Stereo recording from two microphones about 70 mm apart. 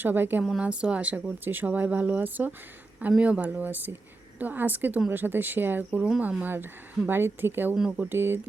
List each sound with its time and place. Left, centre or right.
0.0 s speech: right
0.6 s speech: centre
6.0 s speech: centre
6.4 s a woman's voice: right
7.8 s speech: centre
8.1 s a woman's voice: right